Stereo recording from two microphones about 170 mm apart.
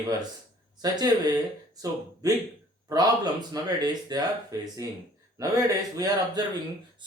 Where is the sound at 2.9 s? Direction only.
25° right (ahead or behind).